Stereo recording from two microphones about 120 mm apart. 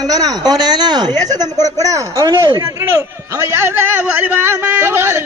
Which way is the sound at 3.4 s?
20° right (ahead or behind).